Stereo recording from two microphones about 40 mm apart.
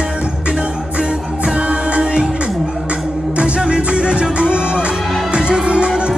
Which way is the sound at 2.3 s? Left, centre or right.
Right.